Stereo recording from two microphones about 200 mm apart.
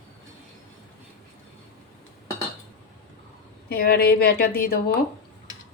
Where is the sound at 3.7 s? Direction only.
50° left (ahead or behind).